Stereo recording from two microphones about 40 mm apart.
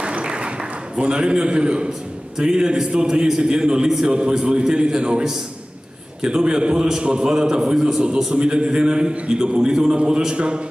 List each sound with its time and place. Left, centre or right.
0.0 s a sound: right
0.9 s a man's voice: right
6.2 s a man's voice: right